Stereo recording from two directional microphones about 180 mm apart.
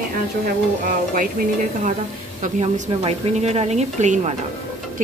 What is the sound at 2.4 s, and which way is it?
A woman's voice, 40° right (ahead or behind).